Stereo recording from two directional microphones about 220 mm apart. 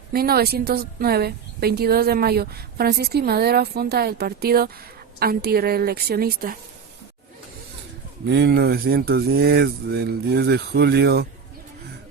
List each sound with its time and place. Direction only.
0.1 s a woman's voice: 45° right (ahead or behind)
8.3 s a woman's voice: 50° right (ahead or behind)